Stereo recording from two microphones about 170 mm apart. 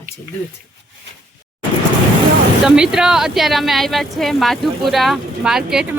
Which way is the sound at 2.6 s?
5° right (ahead or behind).